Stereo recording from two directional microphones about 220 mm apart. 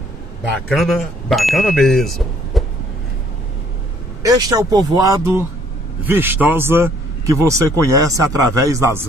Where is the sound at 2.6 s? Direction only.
Centre (ahead or behind).